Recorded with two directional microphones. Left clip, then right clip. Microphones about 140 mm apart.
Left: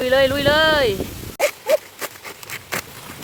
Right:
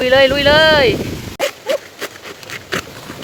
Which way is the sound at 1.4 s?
20° right (ahead or behind).